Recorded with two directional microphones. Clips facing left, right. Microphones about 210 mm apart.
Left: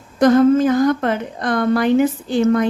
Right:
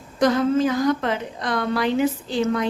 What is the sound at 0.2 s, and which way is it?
A woman's voice, 50° left (ahead or behind).